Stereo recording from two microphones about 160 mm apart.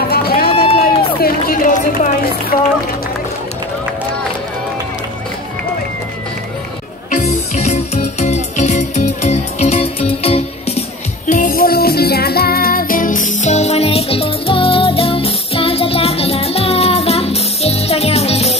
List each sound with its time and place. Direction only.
0.1 s run: 70° left (ahead or behind)
2.5 s speech: 50° left (ahead or behind)
7.1 s music: 45° left (ahead or behind)
11.2 s music: 60° left (ahead or behind); by 18.6 s 40° left (ahead or behind)